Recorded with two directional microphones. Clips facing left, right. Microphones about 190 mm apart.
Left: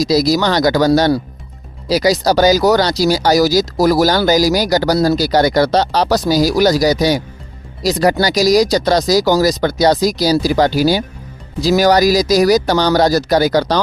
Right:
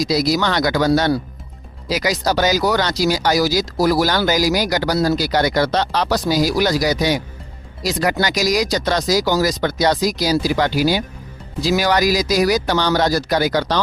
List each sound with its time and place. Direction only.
0.0 s speech: 35° left (ahead or behind)